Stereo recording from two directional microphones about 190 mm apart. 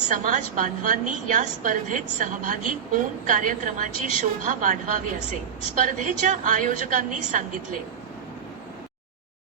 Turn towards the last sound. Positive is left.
turn(degrees=-45)  # may be behind; listen again after turning